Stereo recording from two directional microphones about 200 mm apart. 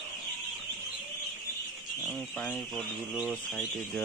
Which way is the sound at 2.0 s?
5° left (ahead or behind).